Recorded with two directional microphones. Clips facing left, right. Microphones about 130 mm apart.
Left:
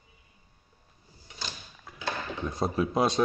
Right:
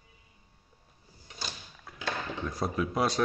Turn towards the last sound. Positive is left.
turn(degrees=20)  # may be behind; listen again after turning